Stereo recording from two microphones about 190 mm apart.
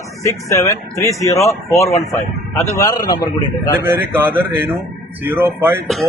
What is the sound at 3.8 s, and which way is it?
A man's voice, 10° right (ahead or behind).